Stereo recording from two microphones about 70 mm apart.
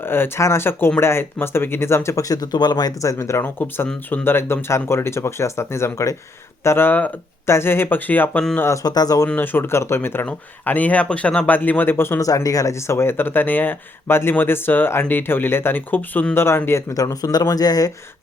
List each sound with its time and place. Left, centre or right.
0.0 s speech: left
2.2 s speech: left
3.0 s speech: left
3.4 s speech: left
8.8 s speech: left
9.2 s speech: left
10.2 s speech: left
12.2 s speech: left
16.9 s speech: left